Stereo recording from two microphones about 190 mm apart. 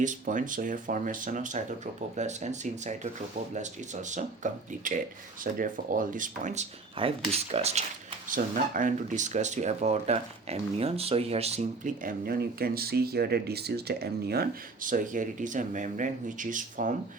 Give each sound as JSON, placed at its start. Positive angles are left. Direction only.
{"t": 0.0, "sound": "speech", "side_deg": -40}